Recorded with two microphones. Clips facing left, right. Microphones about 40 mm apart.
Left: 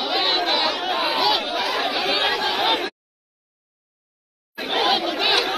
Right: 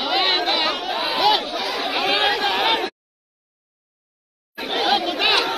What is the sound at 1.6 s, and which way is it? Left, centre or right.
Chatter, left.